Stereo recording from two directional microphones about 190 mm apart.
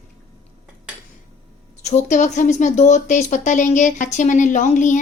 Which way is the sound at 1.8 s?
40° left (ahead or behind).